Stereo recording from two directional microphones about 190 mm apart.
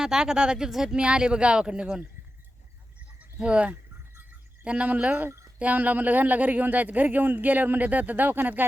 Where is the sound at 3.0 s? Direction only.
5° right (ahead or behind).